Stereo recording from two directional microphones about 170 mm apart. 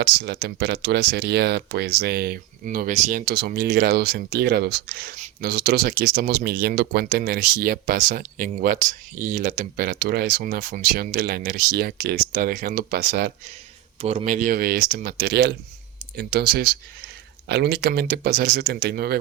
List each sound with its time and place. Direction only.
0.0 s speech: 75° right (ahead or behind)
14.0 s speech: 35° right (ahead or behind); by 19.2 s 70° right (ahead or behind)